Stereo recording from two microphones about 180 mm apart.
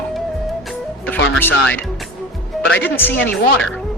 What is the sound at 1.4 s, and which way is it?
Speech, 10° left (ahead or behind).